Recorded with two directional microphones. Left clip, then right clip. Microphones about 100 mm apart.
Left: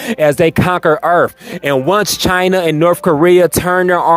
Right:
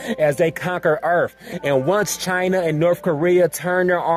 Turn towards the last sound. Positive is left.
turn(degrees=40)  # may be behind; listen again after turning